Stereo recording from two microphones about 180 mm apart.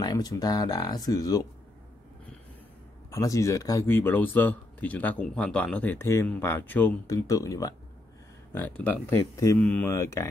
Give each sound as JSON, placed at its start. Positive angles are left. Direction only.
{"t": 0.0, "sound": "speech", "side_deg": 20}
{"t": 3.1, "sound": "speech", "side_deg": 15}